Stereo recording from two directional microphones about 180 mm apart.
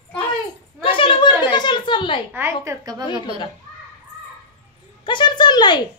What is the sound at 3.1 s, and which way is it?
Speech, 30° right (ahead or behind).